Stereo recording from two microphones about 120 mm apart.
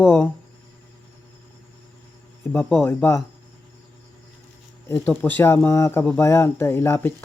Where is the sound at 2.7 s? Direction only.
20° left (ahead or behind).